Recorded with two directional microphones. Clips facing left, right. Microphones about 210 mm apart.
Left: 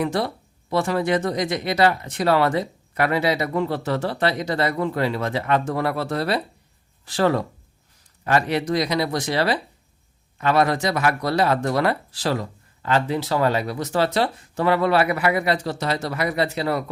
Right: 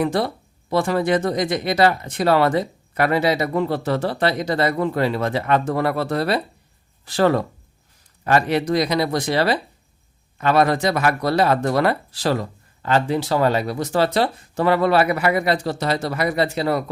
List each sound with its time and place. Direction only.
0.9 s speech: 40° right (ahead or behind)
16.0 s speech: 45° right (ahead or behind)
16.6 s speech: 30° right (ahead or behind)